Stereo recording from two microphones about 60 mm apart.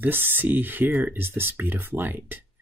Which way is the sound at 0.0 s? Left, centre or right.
Right.